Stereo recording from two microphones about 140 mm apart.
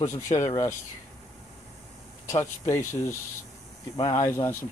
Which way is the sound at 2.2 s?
20° left (ahead or behind).